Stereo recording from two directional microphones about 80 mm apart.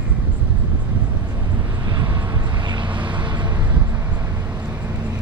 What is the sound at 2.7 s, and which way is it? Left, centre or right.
Vehicle, right.